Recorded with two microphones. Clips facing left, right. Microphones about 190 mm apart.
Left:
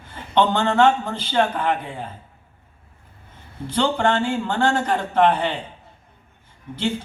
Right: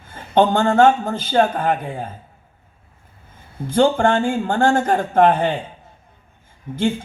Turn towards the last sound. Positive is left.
turn(degrees=-50)  # may be behind; listen again after turning